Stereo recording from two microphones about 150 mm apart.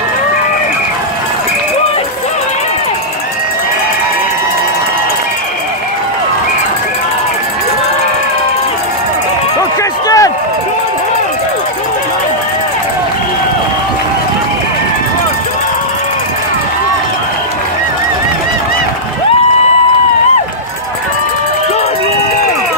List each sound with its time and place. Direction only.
10.0 s run: 20° left (ahead or behind)